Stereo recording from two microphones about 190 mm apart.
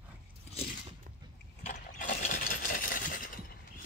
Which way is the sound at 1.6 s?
40° left (ahead or behind).